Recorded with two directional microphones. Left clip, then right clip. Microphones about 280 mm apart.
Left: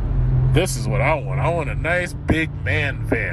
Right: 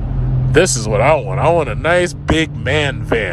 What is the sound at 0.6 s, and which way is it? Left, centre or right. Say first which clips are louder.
Speech: right 8 dB; right.